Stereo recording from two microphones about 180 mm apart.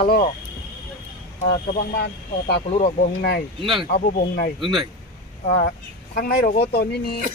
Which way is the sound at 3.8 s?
50° left (ahead or behind).